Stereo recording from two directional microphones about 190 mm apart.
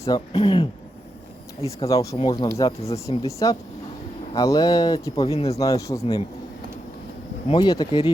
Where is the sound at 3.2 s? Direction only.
15° left (ahead or behind).